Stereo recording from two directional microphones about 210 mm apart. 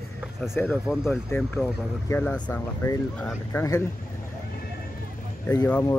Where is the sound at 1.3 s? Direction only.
10° left (ahead or behind).